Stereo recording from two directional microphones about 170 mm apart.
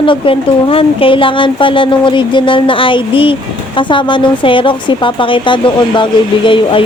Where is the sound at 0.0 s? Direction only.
30° left (ahead or behind).